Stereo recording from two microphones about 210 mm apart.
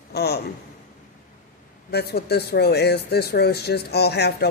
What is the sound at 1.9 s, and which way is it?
Speech, 50° left (ahead or behind).